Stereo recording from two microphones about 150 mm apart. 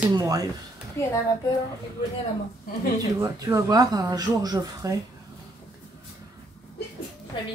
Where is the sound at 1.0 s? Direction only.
15° left (ahead or behind).